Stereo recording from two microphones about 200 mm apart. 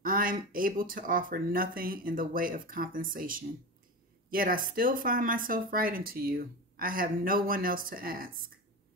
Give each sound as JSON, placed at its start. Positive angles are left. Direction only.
{"t": 0.0, "sound": "speech", "side_deg": -45}